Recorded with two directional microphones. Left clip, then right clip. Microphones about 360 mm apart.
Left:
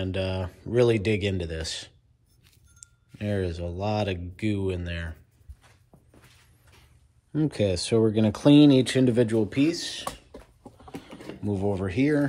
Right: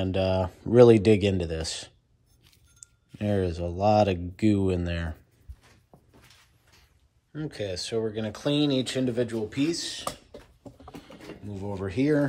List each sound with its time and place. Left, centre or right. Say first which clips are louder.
0.0 s speech: right 4 dB; centre
7.3 s speech: left 7 dB; centre
9.5 s speech: left 3 dB; centre
11.4 s speech: left 7 dB; centre